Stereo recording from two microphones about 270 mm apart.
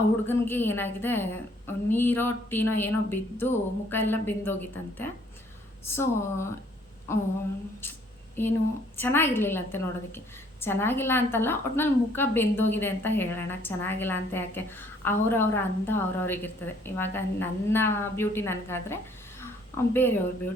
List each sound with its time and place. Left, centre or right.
0.3 s a woman's voice: centre
8.4 s a woman's voice: centre
19.4 s a sound: centre